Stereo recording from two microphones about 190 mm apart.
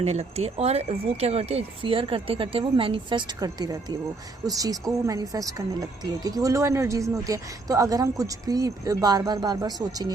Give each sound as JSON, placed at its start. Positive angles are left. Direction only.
{"t": 0.0, "sound": "speech", "side_deg": -35}